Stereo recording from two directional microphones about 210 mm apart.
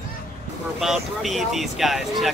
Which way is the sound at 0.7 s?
Centre (ahead or behind).